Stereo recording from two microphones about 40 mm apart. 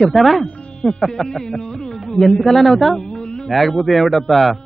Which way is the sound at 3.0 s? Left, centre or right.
Left.